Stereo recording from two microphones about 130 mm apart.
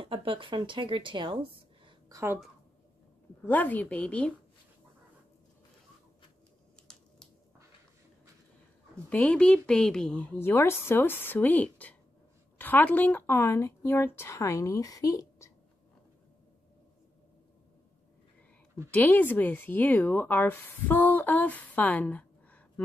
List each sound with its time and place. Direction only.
0.0 s speech: 40° right (ahead or behind)
2.0 s a woman's voice: 25° right (ahead or behind)
3.4 s speech: 15° left (ahead or behind)
9.1 s speech: 10° left (ahead or behind); by 15.5 s 25° left (ahead or behind)
18.9 s speech: 15° left (ahead or behind)